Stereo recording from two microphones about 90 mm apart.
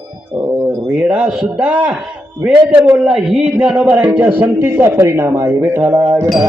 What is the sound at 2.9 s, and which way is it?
Speech, 5° right (ahead or behind).